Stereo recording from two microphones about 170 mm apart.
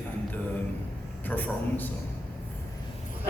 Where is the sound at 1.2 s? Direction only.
10° left (ahead or behind).